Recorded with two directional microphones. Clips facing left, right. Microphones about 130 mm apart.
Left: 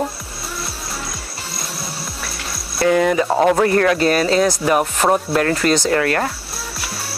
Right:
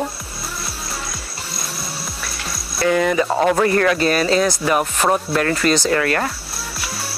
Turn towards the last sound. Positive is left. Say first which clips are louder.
# left 1 dB
turn(degrees=35)  # may be behind; listen again after turning